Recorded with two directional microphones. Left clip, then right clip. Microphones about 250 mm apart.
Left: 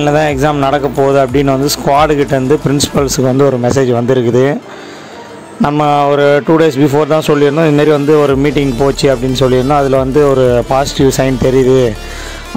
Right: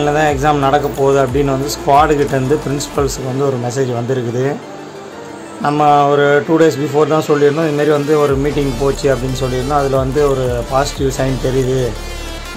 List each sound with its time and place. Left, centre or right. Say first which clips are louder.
0.0 s speech: left 2 dB; left
5.6 s speech: even; left